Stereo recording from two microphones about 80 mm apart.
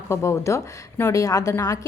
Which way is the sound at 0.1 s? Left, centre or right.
Left.